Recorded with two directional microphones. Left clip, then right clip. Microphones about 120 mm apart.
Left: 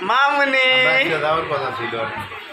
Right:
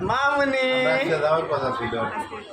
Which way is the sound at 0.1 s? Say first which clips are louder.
Left 6 dB; 15° right (ahead or behind).